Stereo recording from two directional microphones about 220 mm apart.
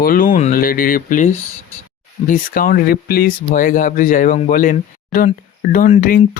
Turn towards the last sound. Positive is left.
turn(degrees=35)  # may be behind; listen again after turning